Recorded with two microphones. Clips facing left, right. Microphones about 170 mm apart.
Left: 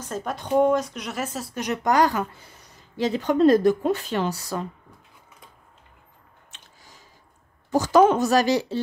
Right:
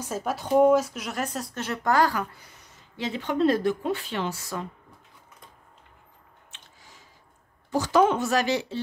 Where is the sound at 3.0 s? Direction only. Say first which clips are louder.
Left 5 dB; 40° left (ahead or behind).